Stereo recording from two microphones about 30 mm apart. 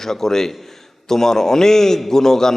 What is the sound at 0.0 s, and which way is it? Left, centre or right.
A man's voice, centre.